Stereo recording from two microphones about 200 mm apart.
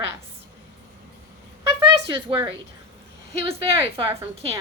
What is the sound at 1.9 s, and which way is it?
Speech, 20° right (ahead or behind).